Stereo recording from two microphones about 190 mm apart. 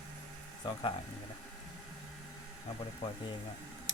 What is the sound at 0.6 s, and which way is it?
Speech, 25° left (ahead or behind).